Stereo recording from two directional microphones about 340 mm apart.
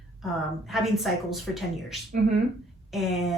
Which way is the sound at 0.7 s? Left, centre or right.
Centre.